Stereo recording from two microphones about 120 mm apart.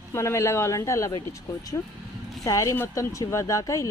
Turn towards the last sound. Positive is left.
turn(degrees=25)  # may be behind; listen again after turning